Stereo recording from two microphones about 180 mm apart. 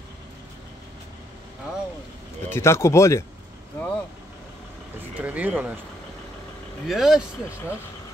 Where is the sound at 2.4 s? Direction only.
15° left (ahead or behind).